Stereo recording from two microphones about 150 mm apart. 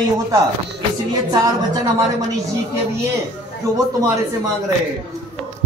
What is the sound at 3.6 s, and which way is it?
Speech, 20° right (ahead or behind).